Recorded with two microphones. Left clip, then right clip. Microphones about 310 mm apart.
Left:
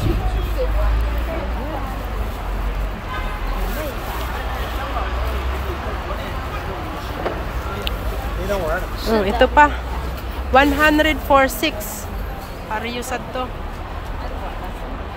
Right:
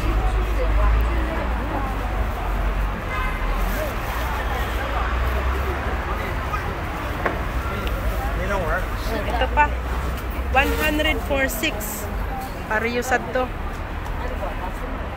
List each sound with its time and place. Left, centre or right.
9.0 s a sound: left
10.5 s speech: centre
12.7 s speech: centre